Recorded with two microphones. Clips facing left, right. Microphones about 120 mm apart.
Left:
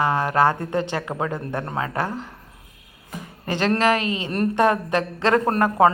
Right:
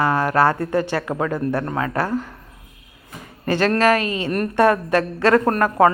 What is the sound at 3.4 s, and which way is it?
A woman's voice, 20° left (ahead or behind).